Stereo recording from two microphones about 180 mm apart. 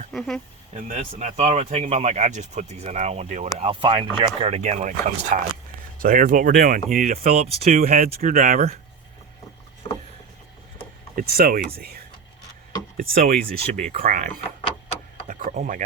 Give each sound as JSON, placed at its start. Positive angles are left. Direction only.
{"t": 0.1, "sound": "speech", "side_deg": 0}
{"t": 0.9, "sound": "speech", "side_deg": -40}
{"t": 3.6, "sound": "speech", "side_deg": -30}
{"t": 6.9, "sound": "speech", "side_deg": -35}
{"t": 7.8, "sound": "speech", "side_deg": -55}
{"t": 9.8, "sound": "vehicle", "side_deg": 10}
{"t": 11.1, "sound": "speech", "side_deg": -55}
{"t": 15.3, "sound": "a sound", "side_deg": -45}